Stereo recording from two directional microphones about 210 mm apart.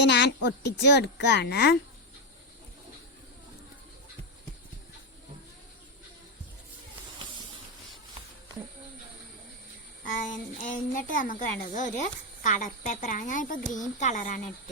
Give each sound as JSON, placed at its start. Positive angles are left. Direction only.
{"t": 0.0, "sound": "a woman's voice", "side_deg": 55}
{"t": 10.2, "sound": "a woman's voice", "side_deg": 40}